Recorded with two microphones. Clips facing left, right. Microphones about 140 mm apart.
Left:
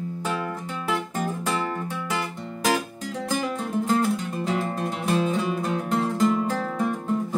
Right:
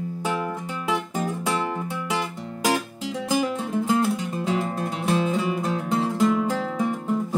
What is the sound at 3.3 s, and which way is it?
Music, 10° right (ahead or behind).